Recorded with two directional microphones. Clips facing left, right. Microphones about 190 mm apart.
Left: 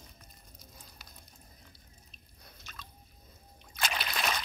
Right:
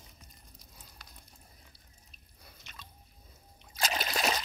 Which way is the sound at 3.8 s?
40° right (ahead or behind).